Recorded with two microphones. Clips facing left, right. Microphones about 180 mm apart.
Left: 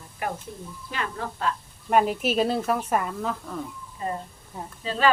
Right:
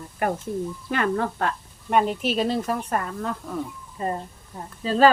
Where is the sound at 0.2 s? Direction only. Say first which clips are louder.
Right 7 dB; 50° right (ahead or behind).